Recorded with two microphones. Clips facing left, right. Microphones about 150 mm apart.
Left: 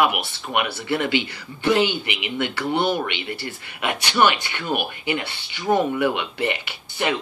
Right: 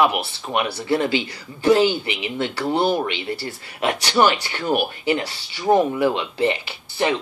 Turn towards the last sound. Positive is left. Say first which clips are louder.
# right 3 dB
turn(degrees=-30)  # may be behind; listen again after turning